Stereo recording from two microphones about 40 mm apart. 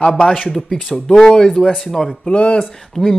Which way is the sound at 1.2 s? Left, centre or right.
Centre.